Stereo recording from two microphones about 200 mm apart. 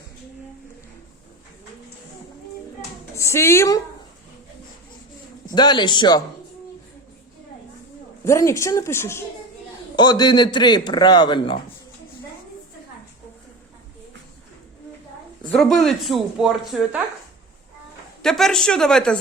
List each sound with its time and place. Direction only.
3.2 s speech: 15° left (ahead or behind)
5.5 s a man's voice: 20° left (ahead or behind)
8.2 s a man's voice: 15° left (ahead or behind)
15.4 s speech: 5° left (ahead or behind)
18.2 s speech: centre (ahead or behind)